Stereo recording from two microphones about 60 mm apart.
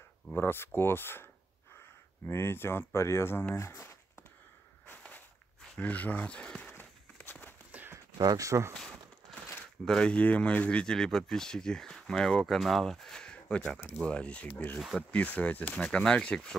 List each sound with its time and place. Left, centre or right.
0.4 s speech: left
5.8 s speech: left
7.2 s a sound: left
7.7 s a sound: right
8.4 s speech: right
8.7 s a sound: centre
9.8 s speech: centre
14.5 s speech: left
15.0 s speech: left